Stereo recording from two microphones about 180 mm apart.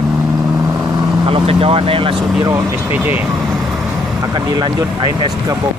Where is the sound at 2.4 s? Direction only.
15° right (ahead or behind).